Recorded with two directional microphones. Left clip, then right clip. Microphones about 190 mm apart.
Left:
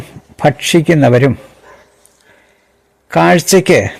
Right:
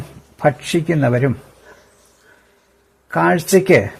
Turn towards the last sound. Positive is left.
turn(degrees=25)  # may be behind; listen again after turning